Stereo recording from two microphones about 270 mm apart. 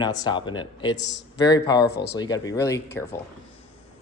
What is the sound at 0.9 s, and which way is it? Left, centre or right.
Speech, left.